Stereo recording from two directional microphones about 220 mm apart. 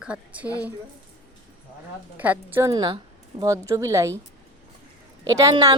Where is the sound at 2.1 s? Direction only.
5° right (ahead or behind).